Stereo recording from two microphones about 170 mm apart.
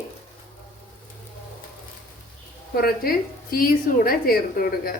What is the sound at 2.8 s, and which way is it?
A woman's voice, 60° left (ahead or behind).